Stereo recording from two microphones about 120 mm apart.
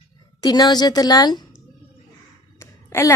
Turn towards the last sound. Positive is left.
turn(degrees=25)  # may be behind; listen again after turning